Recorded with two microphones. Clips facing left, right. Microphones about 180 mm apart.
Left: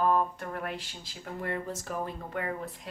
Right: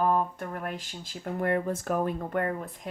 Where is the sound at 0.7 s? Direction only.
45° right (ahead or behind).